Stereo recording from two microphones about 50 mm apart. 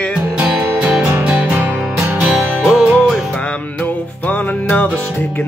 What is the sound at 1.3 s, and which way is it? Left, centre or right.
Music, right.